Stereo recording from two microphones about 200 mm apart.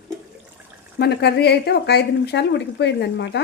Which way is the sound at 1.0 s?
55° left (ahead or behind).